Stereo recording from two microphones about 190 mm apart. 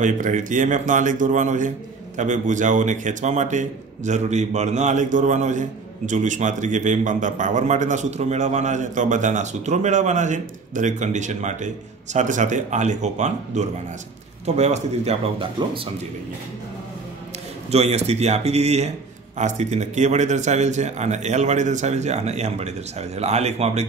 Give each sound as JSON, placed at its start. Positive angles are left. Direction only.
{"t": 0.0, "sound": "a man's voice", "side_deg": -40}
{"t": 17.6, "sound": "a man's voice", "side_deg": -35}